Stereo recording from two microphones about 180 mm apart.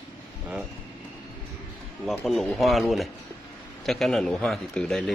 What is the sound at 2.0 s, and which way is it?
Speech, 5° left (ahead or behind).